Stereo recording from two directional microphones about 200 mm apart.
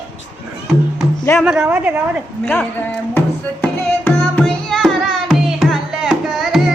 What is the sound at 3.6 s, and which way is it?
Music, 10° left (ahead or behind).